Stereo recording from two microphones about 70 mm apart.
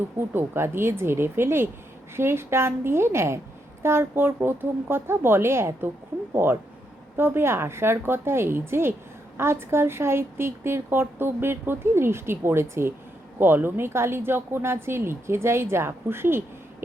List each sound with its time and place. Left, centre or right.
0.2 s speech: right